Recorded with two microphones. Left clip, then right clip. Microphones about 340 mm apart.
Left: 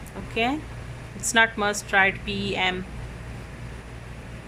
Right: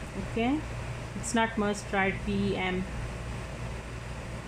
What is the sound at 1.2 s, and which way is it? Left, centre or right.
Speech, left.